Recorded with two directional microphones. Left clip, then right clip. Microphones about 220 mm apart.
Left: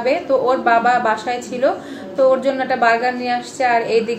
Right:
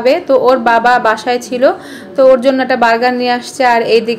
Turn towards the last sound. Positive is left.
turn(degrees=-50)  # may be behind; listen again after turning